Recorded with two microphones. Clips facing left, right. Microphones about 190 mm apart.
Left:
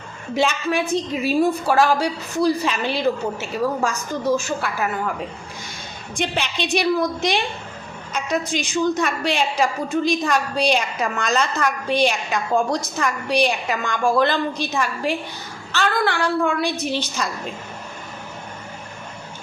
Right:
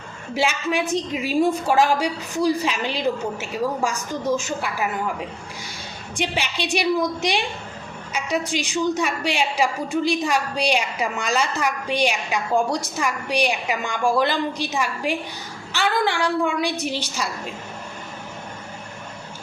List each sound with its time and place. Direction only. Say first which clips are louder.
0.3 s a woman's voice: left 2 dB; 10° right (ahead or behind)
6.6 s a woman's voice: left 2 dB; 15° right (ahead or behind)